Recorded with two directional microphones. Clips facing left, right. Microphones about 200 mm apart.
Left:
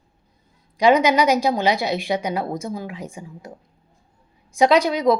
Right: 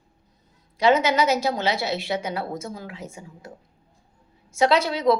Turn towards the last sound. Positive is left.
turn(degrees=15)  # may be behind; listen again after turning